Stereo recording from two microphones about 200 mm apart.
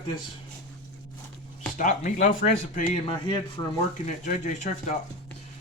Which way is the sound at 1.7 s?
35° left (ahead or behind).